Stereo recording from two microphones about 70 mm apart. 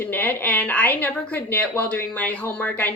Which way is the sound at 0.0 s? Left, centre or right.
Left.